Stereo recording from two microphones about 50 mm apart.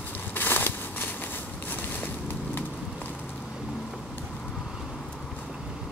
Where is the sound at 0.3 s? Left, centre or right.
Left.